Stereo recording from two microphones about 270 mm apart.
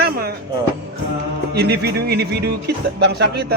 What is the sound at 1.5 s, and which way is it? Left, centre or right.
Speech, right.